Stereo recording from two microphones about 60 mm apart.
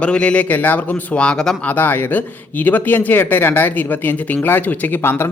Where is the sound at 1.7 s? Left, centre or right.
Left.